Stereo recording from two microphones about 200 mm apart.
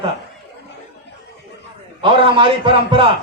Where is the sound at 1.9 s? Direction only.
25° right (ahead or behind).